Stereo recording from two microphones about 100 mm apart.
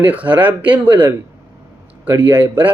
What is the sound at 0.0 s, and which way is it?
A man's voice, 15° right (ahead or behind).